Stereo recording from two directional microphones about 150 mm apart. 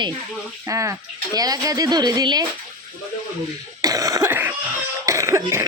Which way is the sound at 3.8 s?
25° right (ahead or behind).